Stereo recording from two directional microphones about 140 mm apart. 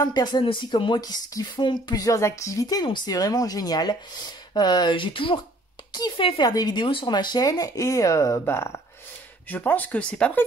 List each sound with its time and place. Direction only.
0.0 s speech: 30° left (ahead or behind); by 10.4 s 5° left (ahead or behind)